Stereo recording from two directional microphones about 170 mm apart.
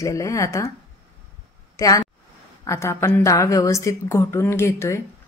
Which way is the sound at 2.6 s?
15° left (ahead or behind).